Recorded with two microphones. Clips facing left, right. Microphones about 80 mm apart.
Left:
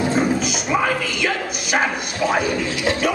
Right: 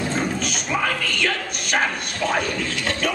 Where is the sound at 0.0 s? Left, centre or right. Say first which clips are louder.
Left 5 dB; centre.